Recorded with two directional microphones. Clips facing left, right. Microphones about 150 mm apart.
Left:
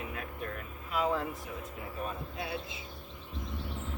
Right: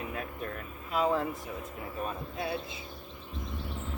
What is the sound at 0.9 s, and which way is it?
Speech, 35° right (ahead or behind).